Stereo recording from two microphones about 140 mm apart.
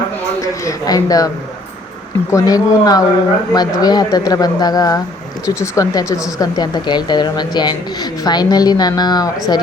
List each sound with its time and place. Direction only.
0.4 s speech: 25° left (ahead or behind)
2.3 s speech: 25° left (ahead or behind)